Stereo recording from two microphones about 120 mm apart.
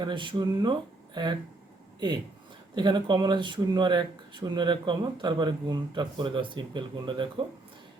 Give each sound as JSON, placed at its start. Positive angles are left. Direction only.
{"t": 0.0, "sound": "speech", "side_deg": -40}
{"t": 2.7, "sound": "speech", "side_deg": -40}